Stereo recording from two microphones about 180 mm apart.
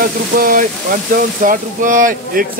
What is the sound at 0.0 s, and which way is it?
Speech, 50° right (ahead or behind).